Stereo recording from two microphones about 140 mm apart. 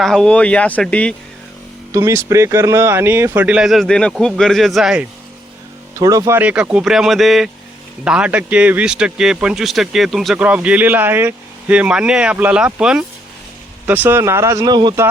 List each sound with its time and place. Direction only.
0.0 s speech: 5° left (ahead or behind)
1.9 s speech: 20° right (ahead or behind); by 5.0 s 5° right (ahead or behind)
6.0 s speech: 25° right (ahead or behind)
6.4 s speech: 10° right (ahead or behind); by 14.9 s 30° right (ahead or behind)